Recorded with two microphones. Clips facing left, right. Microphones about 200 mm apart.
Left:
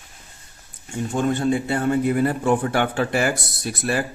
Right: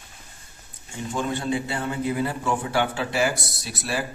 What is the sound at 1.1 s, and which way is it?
A man's voice, 50° left (ahead or behind).